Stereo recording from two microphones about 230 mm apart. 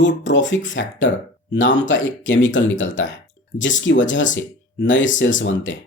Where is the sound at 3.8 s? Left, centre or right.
Left.